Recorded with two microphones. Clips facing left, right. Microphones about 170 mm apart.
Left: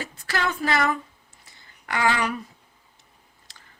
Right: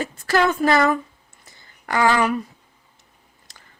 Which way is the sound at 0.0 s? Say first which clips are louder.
Right 8 dB; 45° right (ahead or behind).